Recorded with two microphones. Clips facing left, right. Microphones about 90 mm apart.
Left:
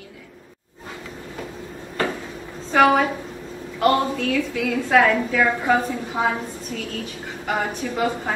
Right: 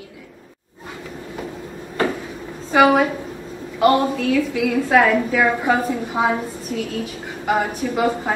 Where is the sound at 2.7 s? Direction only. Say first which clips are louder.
Right 2 dB; 15° right (ahead or behind).